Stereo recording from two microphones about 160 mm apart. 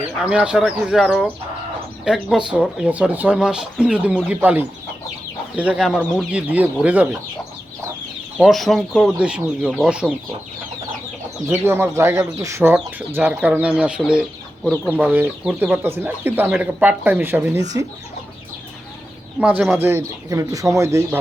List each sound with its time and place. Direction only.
0.2 s speech: 5° right (ahead or behind)
8.4 s speech: centre (ahead or behind)
11.4 s speech: 15° right (ahead or behind)
14.6 s speech: 10° left (ahead or behind)
14.9 s speech: 10° right (ahead or behind)
19.4 s speech: 5° right (ahead or behind)